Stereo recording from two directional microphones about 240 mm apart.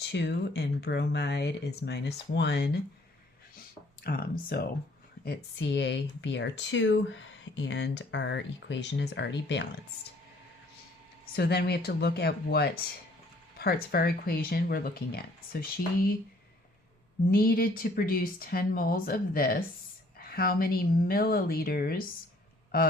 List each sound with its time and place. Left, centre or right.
0.0 s speech: left
4.0 s speech: left
11.3 s speech: left
17.3 s speech: left